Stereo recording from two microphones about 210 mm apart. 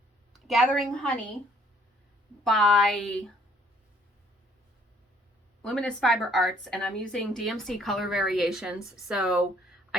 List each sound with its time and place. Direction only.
0.4 s a woman's voice: centre (ahead or behind)
2.4 s a woman's voice: centre (ahead or behind)
5.6 s a woman's voice: 5° left (ahead or behind)